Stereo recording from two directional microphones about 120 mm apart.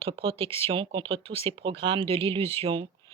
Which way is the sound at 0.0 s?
50° right (ahead or behind).